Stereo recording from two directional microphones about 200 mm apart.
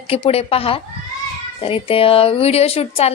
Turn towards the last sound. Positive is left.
turn(degrees=30)  # may be behind; listen again after turning